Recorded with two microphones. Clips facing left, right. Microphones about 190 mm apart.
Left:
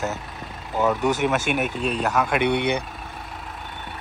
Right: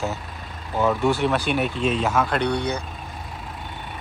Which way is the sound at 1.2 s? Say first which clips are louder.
Right 1 dB; 5° left (ahead or behind).